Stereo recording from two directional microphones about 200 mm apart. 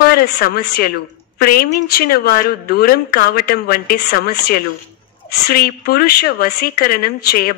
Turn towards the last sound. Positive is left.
turn(degrees=50)  # may be behind; listen again after turning